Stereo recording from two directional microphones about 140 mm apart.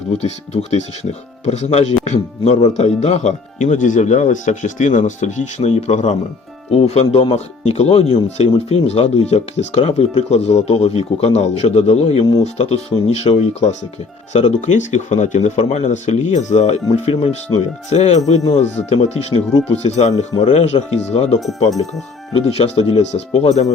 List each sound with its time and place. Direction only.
0.1 s speech: 50° left (ahead or behind)
22.3 s speech: 45° left (ahead or behind)